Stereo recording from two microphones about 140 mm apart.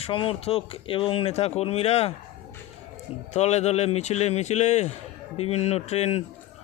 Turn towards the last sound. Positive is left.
turn(degrees=50)  # may be behind; listen again after turning